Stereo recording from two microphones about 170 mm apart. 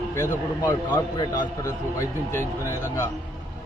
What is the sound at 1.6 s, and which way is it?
A man's voice, 15° left (ahead or behind).